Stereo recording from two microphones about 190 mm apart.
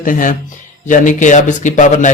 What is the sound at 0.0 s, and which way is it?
A man's voice, 45° left (ahead or behind).